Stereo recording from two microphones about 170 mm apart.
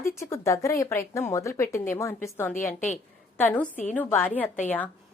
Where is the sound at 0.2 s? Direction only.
15° left (ahead or behind).